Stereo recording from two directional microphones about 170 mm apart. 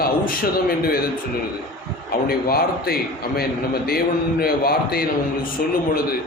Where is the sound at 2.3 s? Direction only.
65° left (ahead or behind).